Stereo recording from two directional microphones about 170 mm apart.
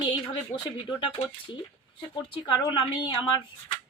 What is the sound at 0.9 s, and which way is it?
Speech, 30° left (ahead or behind).